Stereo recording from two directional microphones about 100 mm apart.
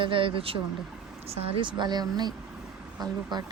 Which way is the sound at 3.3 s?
45° right (ahead or behind).